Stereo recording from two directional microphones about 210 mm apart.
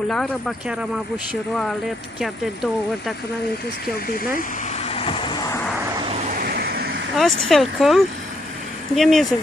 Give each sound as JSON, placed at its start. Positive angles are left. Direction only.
{"t": 0.1, "sound": "speech", "side_deg": 0}
{"t": 2.1, "sound": "speech", "side_deg": 0}
{"t": 4.8, "sound": "vehicle", "side_deg": 25}
{"t": 6.4, "sound": "vehicle", "side_deg": -50}
{"t": 7.2, "sound": "speech", "side_deg": 0}